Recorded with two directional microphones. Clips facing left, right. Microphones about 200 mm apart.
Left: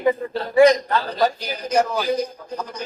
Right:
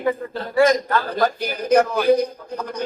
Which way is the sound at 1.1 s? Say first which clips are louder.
Even; 55° right (ahead or behind).